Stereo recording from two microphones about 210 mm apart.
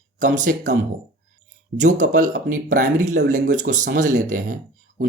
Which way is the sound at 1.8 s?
35° right (ahead or behind).